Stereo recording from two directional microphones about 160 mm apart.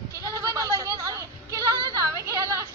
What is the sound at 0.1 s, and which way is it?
Goat, 20° right (ahead or behind).